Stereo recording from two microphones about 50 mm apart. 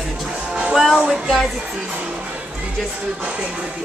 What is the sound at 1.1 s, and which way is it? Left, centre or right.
Speech, centre.